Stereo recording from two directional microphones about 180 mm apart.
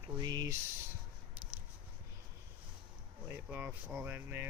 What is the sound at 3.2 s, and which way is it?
Speech, 10° right (ahead or behind).